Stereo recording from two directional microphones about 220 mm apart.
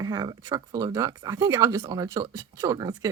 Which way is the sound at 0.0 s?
15° right (ahead or behind).